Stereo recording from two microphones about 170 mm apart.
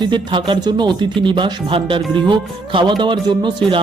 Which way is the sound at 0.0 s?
30° right (ahead or behind).